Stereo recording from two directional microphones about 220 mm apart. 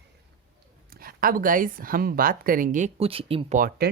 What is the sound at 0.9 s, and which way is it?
Speech, 40° right (ahead or behind).